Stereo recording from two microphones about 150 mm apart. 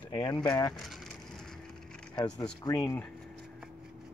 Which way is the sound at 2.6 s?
25° left (ahead or behind).